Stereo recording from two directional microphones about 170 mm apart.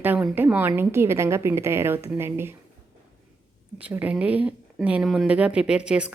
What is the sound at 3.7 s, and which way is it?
A woman's voice, 10° right (ahead or behind).